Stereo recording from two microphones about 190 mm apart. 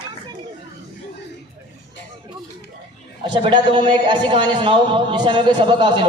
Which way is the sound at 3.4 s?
25° right (ahead or behind).